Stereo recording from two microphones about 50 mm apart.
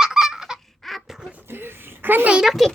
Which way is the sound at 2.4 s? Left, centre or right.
Centre.